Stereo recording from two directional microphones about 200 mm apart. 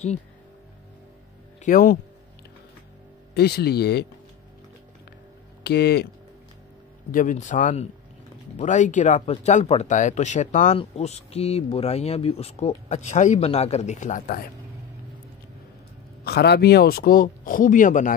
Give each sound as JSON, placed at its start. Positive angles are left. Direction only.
{"t": 1.6, "sound": "speech", "side_deg": 45}
{"t": 3.3, "sound": "speech", "side_deg": 55}
{"t": 5.6, "sound": "speech", "side_deg": 55}
{"t": 7.1, "sound": "speech", "side_deg": 40}
{"t": 16.3, "sound": "speech", "side_deg": 55}